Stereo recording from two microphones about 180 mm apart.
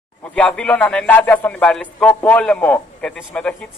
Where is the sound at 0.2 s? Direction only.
5° left (ahead or behind).